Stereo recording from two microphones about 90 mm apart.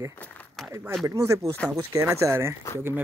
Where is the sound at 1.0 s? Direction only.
30° right (ahead or behind).